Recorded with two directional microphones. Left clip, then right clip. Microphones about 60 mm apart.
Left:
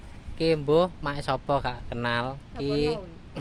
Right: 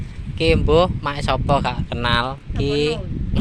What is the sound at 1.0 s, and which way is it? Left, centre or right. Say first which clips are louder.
Speech: right 7 dB; right.